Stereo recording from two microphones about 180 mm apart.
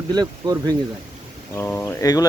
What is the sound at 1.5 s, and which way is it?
Speech, 15° left (ahead or behind).